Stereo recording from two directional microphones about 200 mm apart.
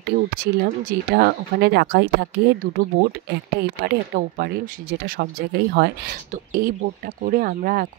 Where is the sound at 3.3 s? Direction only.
55° right (ahead or behind).